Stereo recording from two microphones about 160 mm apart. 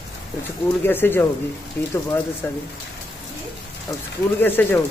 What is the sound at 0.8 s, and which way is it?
Speech, 15° left (ahead or behind).